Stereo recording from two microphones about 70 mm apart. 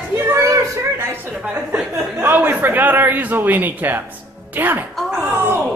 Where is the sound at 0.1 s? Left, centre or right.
Right.